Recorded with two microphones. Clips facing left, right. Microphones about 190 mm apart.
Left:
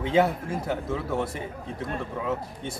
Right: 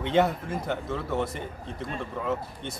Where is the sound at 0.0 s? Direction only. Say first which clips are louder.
Left 1 dB; 5° left (ahead or behind).